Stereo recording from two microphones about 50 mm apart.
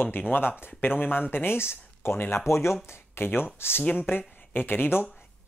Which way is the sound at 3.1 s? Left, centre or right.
Left.